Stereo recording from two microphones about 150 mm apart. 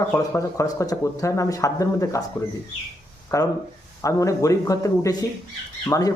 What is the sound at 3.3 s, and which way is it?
Speech, 20° left (ahead or behind).